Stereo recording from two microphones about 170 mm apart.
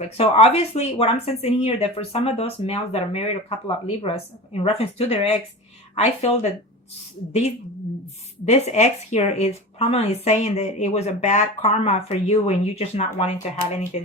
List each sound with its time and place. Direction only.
0.0 s speech: 35° left (ahead or behind)
8.4 s speech: 40° left (ahead or behind)